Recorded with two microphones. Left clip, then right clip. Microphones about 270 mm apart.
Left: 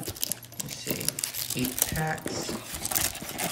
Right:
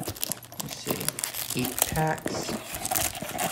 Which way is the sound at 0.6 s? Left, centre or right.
Centre.